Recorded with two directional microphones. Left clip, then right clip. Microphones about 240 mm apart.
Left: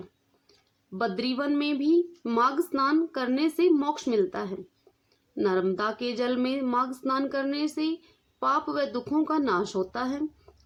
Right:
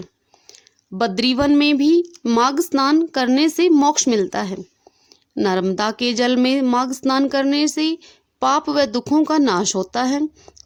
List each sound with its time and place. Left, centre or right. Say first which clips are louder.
0.9 s speech: right 10 dB; right